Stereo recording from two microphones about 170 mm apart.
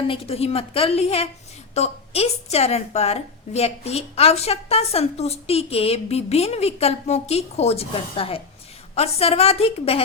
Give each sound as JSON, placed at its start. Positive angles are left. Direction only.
{"t": 0.1, "sound": "a woman's voice", "side_deg": 35}